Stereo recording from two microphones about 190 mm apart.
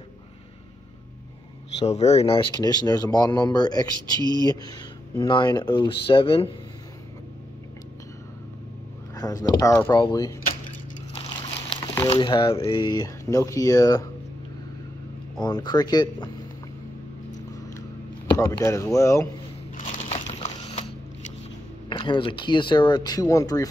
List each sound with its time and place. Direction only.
1.8 s speech: 35° left (ahead or behind)
9.1 s speech: 20° left (ahead or behind)
11.7 s a sound: 20° left (ahead or behind)
12.1 s speech: 25° left (ahead or behind)
15.3 s speech: 20° left (ahead or behind)
18.5 s speech: 15° left (ahead or behind)
20.3 s a sound: 35° left (ahead or behind)
21.8 s speech: 25° left (ahead or behind)